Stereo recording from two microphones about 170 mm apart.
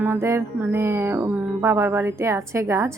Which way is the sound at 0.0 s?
15° right (ahead or behind).